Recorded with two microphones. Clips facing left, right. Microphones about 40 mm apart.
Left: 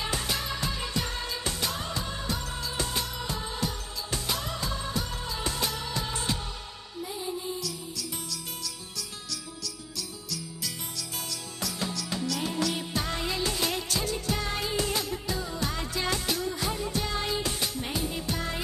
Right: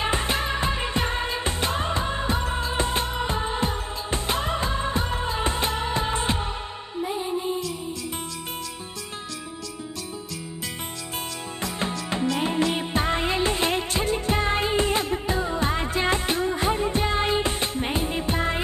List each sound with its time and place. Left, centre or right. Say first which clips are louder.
0.0 s music: right 7 dB; right
11.6 s music: right 5 dB; right